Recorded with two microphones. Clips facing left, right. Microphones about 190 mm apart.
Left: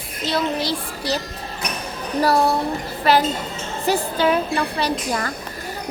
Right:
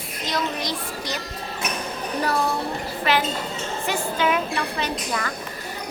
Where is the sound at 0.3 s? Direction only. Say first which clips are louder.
Left 5 dB; 30° left (ahead or behind).